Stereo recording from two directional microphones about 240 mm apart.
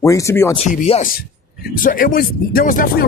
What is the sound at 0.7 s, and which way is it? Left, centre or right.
Speech, left.